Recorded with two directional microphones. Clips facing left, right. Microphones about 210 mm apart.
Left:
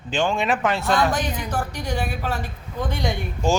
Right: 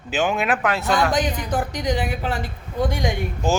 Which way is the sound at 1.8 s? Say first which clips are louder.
Right 3 dB; 15° right (ahead or behind).